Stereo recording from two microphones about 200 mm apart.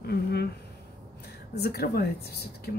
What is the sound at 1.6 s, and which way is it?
A woman's voice, 50° left (ahead or behind).